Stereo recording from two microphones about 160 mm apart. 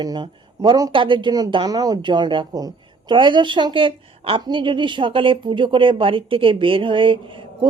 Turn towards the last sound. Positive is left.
turn(degrees=-30)  # may be behind; listen again after turning